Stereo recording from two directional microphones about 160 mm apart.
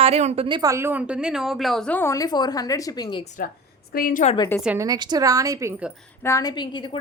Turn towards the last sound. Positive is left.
turn(degrees=30)  # may be behind; listen again after turning